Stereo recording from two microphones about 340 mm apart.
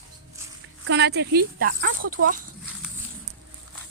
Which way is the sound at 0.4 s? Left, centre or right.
Centre.